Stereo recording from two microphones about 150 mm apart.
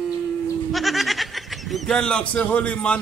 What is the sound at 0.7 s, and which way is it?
Speech, centre (ahead or behind).